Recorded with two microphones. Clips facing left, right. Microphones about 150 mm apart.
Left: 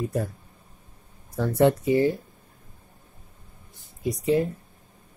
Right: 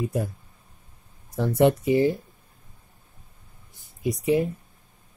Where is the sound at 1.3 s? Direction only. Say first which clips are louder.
Even; 15° right (ahead or behind).